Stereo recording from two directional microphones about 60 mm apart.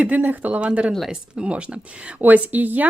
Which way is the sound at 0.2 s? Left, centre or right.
Right.